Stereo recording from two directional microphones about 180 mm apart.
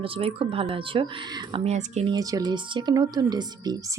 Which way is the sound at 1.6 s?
40° right (ahead or behind).